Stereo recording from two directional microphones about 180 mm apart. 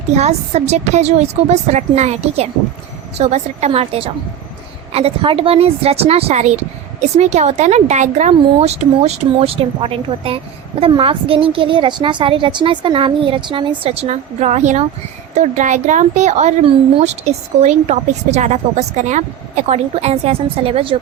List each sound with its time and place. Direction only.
0.1 s speech: 40° right (ahead or behind)